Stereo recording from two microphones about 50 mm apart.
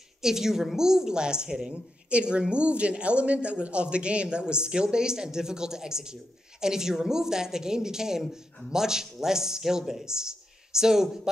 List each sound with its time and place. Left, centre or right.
0.2 s a woman's voice: centre